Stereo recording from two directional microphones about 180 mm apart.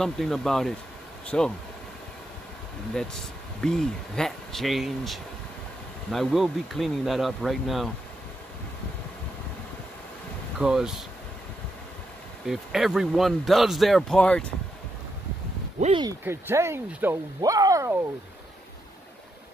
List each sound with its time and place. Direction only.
0.0 s speech: centre (ahead or behind)
3.6 s speech: 5° left (ahead or behind)
10.6 s speech: 5° right (ahead or behind)
12.4 s speech: centre (ahead or behind)
16.0 s speech: 15° right (ahead or behind)